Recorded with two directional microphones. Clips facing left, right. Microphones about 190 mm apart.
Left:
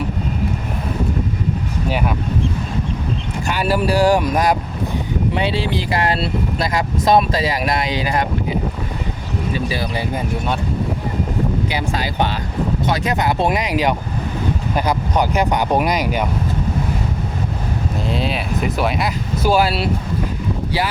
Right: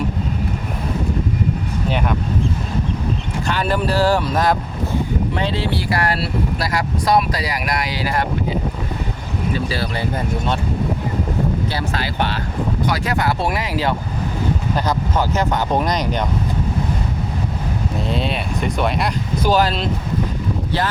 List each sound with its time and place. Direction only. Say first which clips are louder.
3.4 s speech: left 2 dB; 10° left (ahead or behind)
9.6 s speech: even; 15° left (ahead or behind)
11.7 s speech: left 1 dB; 15° left (ahead or behind)
17.9 s speech: even; centre (ahead or behind)